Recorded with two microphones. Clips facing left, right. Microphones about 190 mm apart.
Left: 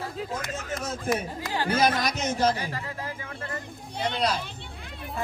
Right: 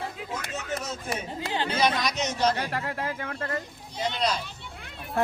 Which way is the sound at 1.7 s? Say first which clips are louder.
Left 2 dB; 55° left (ahead or behind).